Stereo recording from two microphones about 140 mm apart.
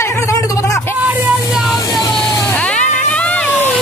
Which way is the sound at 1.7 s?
25° left (ahead or behind).